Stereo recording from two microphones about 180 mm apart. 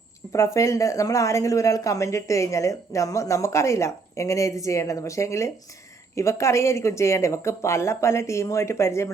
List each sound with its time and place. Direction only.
0.3 s speech: 15° left (ahead or behind)